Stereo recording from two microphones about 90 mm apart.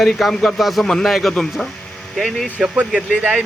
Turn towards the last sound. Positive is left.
turn(degrees=-15)  # may be behind; listen again after turning